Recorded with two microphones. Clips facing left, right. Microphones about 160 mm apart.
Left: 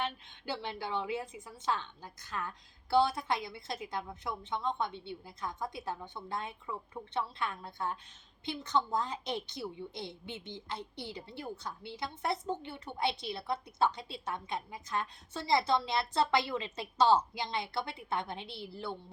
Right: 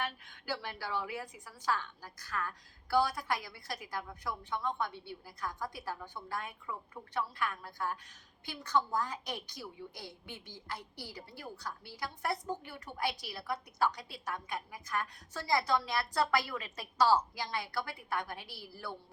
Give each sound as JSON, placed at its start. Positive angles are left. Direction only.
{"t": 0.0, "sound": "a woman's voice", "side_deg": 25}